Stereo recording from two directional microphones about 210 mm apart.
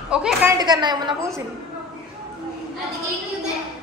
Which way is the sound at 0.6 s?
20° right (ahead or behind).